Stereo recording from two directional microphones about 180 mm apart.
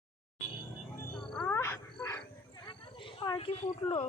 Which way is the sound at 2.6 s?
25° left (ahead or behind).